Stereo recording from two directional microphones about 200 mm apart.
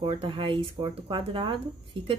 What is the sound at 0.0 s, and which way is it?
Speech, 25° right (ahead or behind).